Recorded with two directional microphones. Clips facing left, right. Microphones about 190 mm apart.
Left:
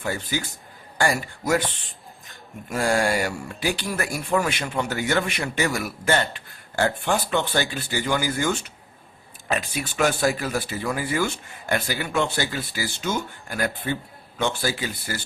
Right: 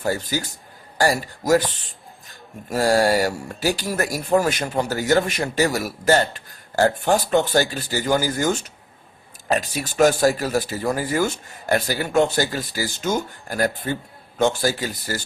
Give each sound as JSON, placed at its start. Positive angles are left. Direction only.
{"t": 0.0, "sound": "speech", "side_deg": -40}